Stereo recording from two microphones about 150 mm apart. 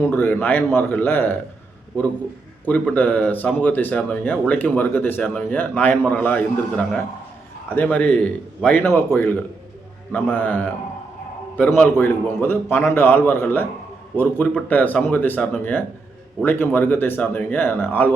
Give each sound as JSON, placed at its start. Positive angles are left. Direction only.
{"t": 0.1, "sound": "speech", "side_deg": 15}
{"t": 2.6, "sound": "speech", "side_deg": 10}